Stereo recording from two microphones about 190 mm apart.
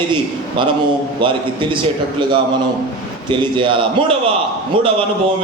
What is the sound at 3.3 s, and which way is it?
A man's voice, 25° right (ahead or behind).